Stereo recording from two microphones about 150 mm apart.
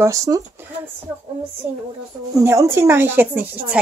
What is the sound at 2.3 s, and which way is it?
Speech, 20° right (ahead or behind).